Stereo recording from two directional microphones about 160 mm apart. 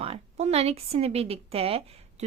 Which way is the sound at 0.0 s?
40° right (ahead or behind).